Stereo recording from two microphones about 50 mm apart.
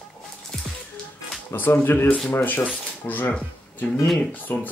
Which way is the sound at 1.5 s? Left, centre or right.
Left.